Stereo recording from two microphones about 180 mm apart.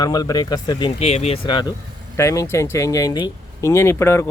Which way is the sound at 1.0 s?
35° left (ahead or behind).